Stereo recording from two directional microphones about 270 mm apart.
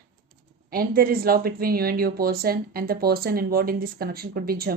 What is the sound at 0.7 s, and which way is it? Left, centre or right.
Speech, right.